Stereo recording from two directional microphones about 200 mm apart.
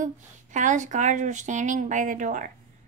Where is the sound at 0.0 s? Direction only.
40° right (ahead or behind).